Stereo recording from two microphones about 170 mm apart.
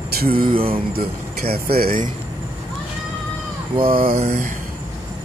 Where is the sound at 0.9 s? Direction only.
65° right (ahead or behind).